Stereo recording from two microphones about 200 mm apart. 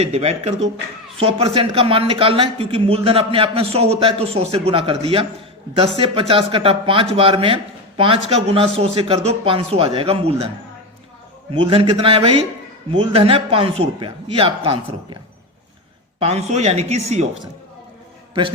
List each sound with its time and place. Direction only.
0.0 s a man's voice: 30° right (ahead or behind)
11.5 s a man's voice: 25° right (ahead or behind)
16.2 s speech: 35° right (ahead or behind)